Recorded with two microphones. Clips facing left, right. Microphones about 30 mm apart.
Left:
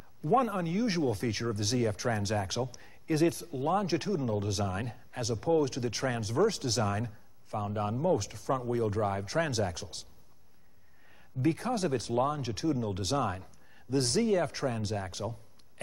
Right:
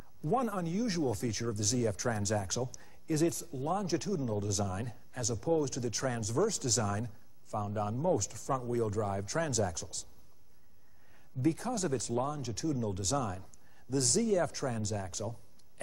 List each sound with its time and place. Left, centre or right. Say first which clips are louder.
0.2 s speech: left 4 dB; left
11.1 s speech: left 2 dB; left